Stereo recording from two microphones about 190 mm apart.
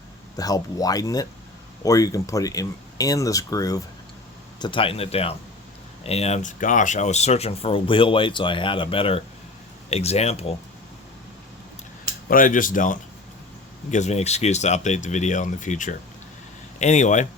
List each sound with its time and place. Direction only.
0.3 s speech: 20° left (ahead or behind)
12.3 s speech: 45° left (ahead or behind)